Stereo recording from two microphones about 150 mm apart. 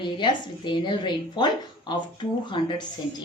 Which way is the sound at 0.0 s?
30° left (ahead or behind).